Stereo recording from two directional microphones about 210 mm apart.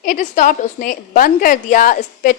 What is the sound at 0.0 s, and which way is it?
A woman's voice, 40° left (ahead or behind).